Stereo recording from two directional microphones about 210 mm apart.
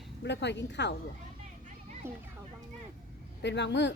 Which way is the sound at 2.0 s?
10° right (ahead or behind).